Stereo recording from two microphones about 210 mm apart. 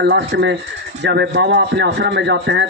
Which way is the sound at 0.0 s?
55° right (ahead or behind).